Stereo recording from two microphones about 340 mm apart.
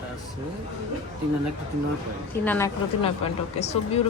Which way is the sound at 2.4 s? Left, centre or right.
Centre.